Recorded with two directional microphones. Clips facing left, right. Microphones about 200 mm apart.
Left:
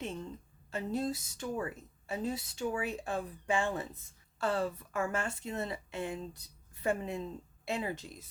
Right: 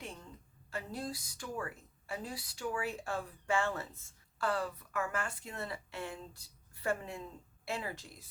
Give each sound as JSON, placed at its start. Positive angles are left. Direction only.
{"t": 0.0, "sound": "a woman's voice", "side_deg": 25}